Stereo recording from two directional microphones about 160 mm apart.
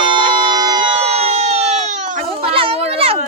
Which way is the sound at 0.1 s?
30° right (ahead or behind).